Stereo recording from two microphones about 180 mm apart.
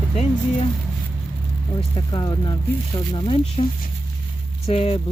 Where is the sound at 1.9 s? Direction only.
25° left (ahead or behind).